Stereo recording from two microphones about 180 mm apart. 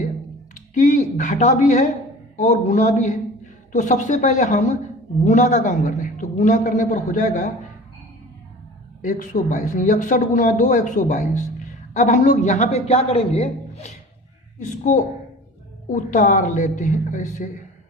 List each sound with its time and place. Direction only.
0.7 s a woman's voice: 45° left (ahead or behind)
9.0 s speech: 45° left (ahead or behind)